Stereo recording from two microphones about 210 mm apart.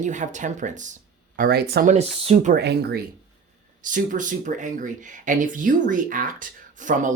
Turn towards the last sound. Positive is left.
turn(degrees=-35)  # may be behind; listen again after turning